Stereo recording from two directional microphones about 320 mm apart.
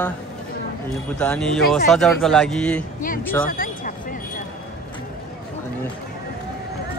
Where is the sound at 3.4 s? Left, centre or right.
Left.